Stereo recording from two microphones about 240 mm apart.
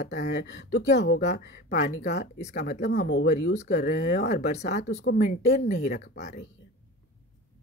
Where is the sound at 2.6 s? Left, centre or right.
Left.